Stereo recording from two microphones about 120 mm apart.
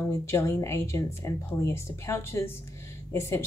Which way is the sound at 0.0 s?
25° left (ahead or behind).